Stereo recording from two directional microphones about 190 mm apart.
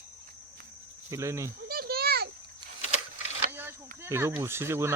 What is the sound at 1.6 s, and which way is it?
Children playing, 55° right (ahead or behind).